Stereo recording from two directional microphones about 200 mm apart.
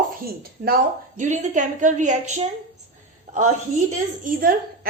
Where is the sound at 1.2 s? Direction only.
40° right (ahead or behind).